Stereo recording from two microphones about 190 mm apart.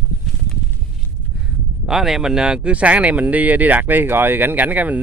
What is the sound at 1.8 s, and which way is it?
Speech, centre (ahead or behind).